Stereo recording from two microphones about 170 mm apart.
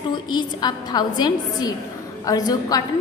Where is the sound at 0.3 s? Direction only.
25° left (ahead or behind).